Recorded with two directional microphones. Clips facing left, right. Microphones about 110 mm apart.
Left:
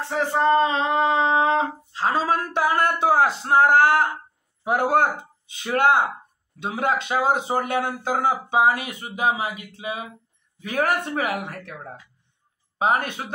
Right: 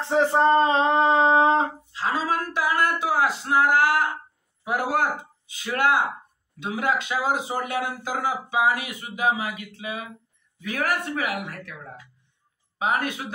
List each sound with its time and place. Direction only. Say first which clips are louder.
0.0 s speech: right 2 dB; 25° right (ahead or behind)
1.9 s a sound: left 3 dB; 30° left (ahead or behind)
4.6 s speech: left 4 dB; 25° left (ahead or behind)
12.7 s speech: left 3 dB; 35° left (ahead or behind)